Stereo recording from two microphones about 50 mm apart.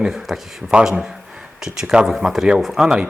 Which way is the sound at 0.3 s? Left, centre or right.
Centre.